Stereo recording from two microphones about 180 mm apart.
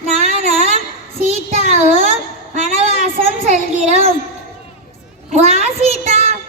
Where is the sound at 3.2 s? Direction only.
35° right (ahead or behind).